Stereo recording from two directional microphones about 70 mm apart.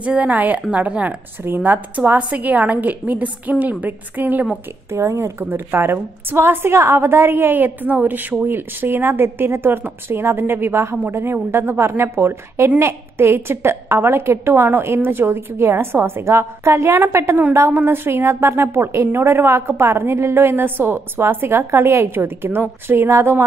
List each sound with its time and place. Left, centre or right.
0.0 s a woman's voice: centre
4.9 s speech: right
5.4 s speech: right